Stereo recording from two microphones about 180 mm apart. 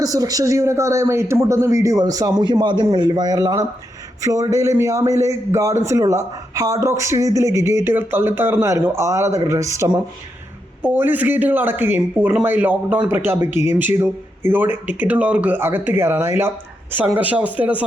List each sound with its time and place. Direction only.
0.0 s speech: 20° right (ahead or behind)